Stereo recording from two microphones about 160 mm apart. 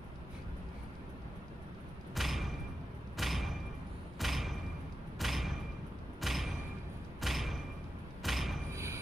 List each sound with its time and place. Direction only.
2.1 s thump: centre (ahead or behind)
8.2 s a sound: centre (ahead or behind)
8.7 s music: 15° right (ahead or behind)